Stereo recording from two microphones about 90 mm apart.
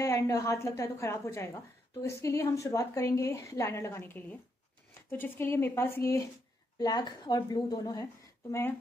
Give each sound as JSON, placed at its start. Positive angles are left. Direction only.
{"t": 0.0, "sound": "a woman's voice", "side_deg": 35}
{"t": 6.8, "sound": "a woman's voice", "side_deg": 50}